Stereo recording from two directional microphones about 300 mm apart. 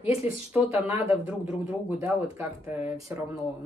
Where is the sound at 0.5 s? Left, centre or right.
Centre.